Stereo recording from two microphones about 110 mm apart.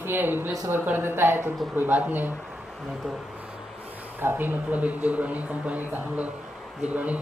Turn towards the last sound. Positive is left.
turn(degrees=-15)  # may be behind; listen again after turning